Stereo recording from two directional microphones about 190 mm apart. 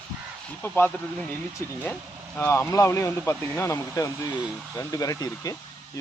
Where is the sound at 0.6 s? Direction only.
10° left (ahead or behind).